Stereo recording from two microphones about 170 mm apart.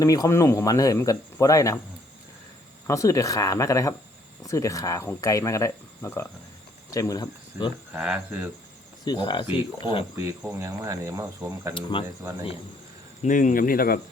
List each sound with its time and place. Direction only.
0.0 s speech: 20° left (ahead or behind)
2.8 s speech: 20° left (ahead or behind)
7.9 s speech: 5° right (ahead or behind)
9.0 s speech: 25° left (ahead or behind)
10.2 s speech: 15° right (ahead or behind)
11.7 s speech: 30° left (ahead or behind)
12.0 s speech: 15° right (ahead or behind)
13.2 s speech: 50° left (ahead or behind)